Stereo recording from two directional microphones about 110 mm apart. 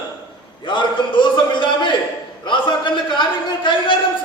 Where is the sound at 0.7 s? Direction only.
45° left (ahead or behind).